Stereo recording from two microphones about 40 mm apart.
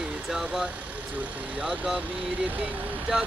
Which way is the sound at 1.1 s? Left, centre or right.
Right.